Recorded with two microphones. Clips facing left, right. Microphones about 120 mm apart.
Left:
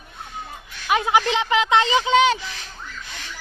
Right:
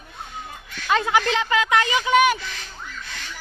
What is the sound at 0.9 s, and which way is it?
Speech, 15° left (ahead or behind).